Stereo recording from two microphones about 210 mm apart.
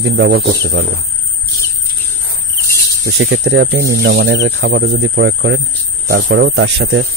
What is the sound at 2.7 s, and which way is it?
Speech, 50° right (ahead or behind).